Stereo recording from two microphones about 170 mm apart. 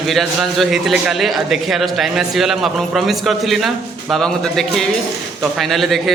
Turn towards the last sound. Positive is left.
turn(degrees=0)  # may be behind; listen again after turning